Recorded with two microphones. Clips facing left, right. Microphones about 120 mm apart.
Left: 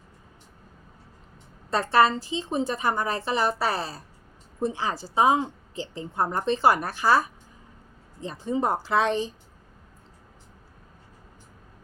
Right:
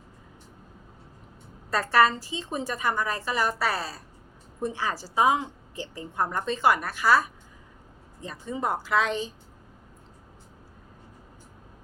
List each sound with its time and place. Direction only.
1.7 s a woman's voice: 25° left (ahead or behind)